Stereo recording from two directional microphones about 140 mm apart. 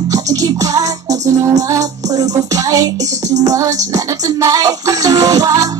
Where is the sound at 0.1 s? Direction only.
25° right (ahead or behind).